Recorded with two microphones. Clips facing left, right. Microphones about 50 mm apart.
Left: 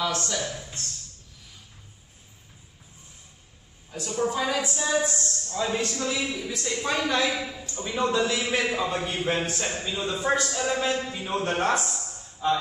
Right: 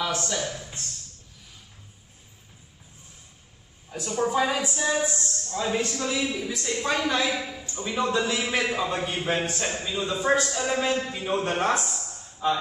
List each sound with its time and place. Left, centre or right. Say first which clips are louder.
0.0 s a man's voice: even; centre
3.9 s a man's voice: right 2 dB; centre
5.1 s a man's voice: even; centre